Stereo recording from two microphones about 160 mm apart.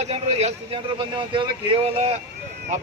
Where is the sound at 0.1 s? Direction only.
40° right (ahead or behind).